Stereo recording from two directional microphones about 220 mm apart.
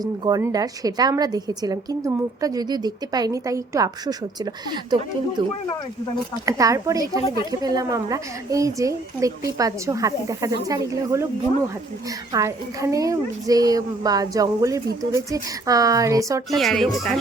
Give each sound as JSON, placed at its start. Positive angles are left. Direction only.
{"t": 0.0, "sound": "a woman's voice", "side_deg": -15}
{"t": 5.4, "sound": "a woman's voice", "side_deg": -20}
{"t": 12.3, "sound": "a woman's voice", "side_deg": -15}
{"t": 16.6, "sound": "speech", "side_deg": 0}